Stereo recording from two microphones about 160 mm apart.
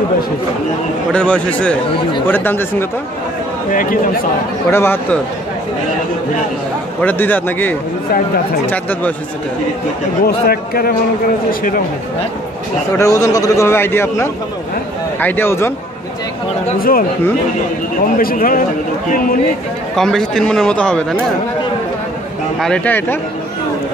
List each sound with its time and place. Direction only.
1.1 s a man's voice: 5° left (ahead or behind)
3.7 s speech: 60° left (ahead or behind)
4.6 s a man's voice: 15° left (ahead or behind)
7.0 s a man's voice: 10° left (ahead or behind)
10.2 s speech: 70° left (ahead or behind)
12.9 s a man's voice: 20° left (ahead or behind)
18.1 s speech: 60° left (ahead or behind)
20.0 s a man's voice: 5° left (ahead or behind)
22.6 s a man's voice: 10° left (ahead or behind)